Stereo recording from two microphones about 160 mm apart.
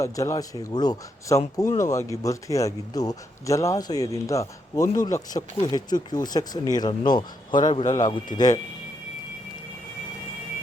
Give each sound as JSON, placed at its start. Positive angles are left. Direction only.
{"t": 0.0, "sound": "a man's voice", "side_deg": 20}
{"t": 7.7, "sound": "a man's voice", "side_deg": 45}
{"t": 8.0, "sound": "a man's voice", "side_deg": 25}